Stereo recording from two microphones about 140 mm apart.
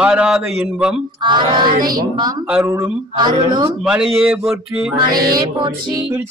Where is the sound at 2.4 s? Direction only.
10° right (ahead or behind).